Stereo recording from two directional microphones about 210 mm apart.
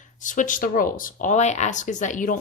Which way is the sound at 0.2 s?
35° left (ahead or behind).